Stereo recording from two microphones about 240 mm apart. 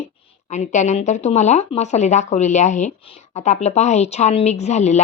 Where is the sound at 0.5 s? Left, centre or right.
Left.